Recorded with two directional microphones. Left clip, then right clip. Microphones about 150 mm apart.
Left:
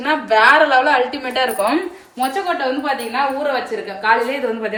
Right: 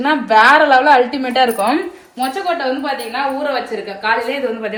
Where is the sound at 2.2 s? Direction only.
Centre (ahead or behind).